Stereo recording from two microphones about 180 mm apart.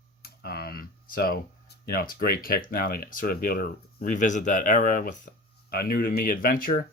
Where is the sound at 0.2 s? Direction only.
60° left (ahead or behind).